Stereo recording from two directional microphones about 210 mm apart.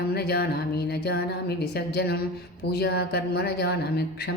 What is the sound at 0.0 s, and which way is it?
A woman's voice, 50° left (ahead or behind).